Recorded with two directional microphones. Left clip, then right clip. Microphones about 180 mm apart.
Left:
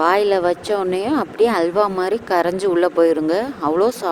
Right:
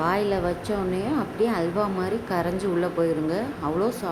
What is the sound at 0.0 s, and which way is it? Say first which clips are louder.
A woman's voice: left 8 dB; 50° left (ahead or behind).